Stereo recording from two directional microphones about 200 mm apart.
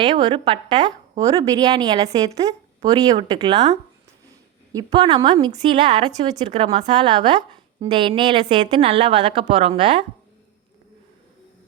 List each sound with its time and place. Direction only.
0.0 s speech: 20° right (ahead or behind)